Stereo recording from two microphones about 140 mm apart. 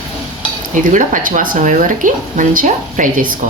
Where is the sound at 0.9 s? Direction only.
70° right (ahead or behind).